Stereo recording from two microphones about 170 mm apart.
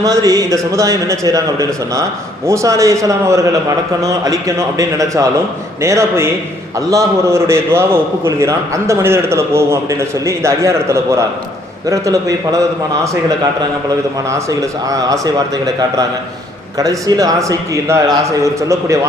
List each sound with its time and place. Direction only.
0.0 s a man's voice: 20° right (ahead or behind)
14.3 s a man's voice: 15° right (ahead or behind)